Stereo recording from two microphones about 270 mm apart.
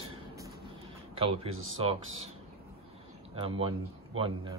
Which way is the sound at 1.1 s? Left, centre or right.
Right.